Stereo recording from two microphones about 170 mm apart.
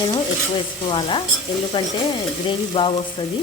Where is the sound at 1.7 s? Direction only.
30° left (ahead or behind).